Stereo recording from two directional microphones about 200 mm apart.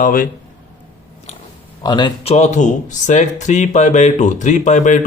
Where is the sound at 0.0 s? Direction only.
40° left (ahead or behind).